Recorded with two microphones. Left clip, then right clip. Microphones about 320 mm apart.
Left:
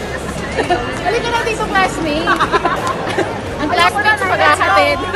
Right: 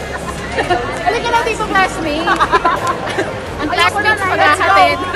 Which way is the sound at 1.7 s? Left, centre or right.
Centre.